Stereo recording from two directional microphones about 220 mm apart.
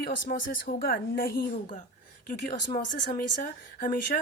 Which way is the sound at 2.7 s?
40° left (ahead or behind).